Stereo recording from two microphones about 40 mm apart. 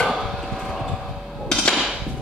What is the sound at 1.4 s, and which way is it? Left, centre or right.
Hammer, centre.